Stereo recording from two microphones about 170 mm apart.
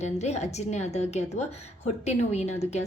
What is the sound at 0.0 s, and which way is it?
A woman's voice, 40° left (ahead or behind).